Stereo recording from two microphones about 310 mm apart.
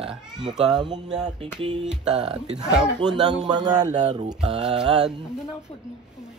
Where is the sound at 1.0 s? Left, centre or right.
Centre.